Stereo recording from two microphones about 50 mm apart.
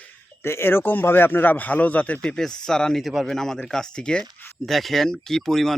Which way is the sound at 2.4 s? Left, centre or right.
Centre.